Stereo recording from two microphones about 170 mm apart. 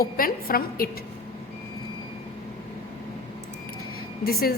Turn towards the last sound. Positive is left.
turn(degrees=65)  # may be behind; listen again after turning